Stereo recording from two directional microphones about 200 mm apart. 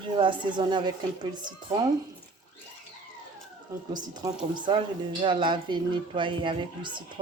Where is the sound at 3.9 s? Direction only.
20° right (ahead or behind).